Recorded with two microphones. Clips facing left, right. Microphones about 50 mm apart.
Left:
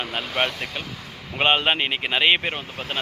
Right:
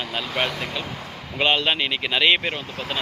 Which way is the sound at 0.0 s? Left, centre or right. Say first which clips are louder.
Left 1 dB; left.